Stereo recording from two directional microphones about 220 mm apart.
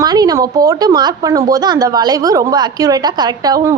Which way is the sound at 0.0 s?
15° right (ahead or behind).